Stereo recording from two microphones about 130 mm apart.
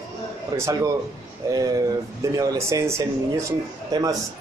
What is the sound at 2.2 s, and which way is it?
A man's voice, 25° right (ahead or behind).